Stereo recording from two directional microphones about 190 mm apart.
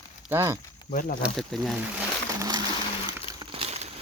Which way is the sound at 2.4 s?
20° right (ahead or behind).